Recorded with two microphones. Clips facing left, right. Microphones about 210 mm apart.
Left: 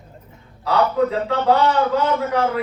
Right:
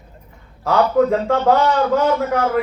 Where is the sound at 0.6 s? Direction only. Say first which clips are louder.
Right 3 dB; 45° right (ahead or behind).